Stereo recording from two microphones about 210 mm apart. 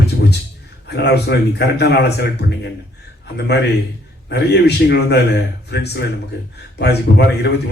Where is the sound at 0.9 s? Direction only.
50° left (ahead or behind).